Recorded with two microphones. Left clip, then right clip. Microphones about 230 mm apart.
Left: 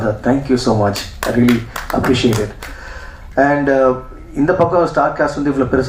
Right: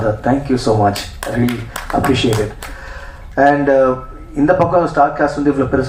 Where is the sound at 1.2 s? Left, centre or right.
Right.